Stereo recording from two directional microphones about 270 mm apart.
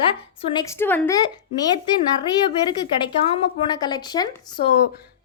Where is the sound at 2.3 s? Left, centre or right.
Centre.